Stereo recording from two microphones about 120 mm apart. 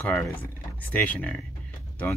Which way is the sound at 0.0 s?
10° left (ahead or behind).